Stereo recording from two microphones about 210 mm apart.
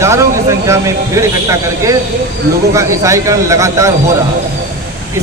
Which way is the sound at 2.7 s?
15° right (ahead or behind).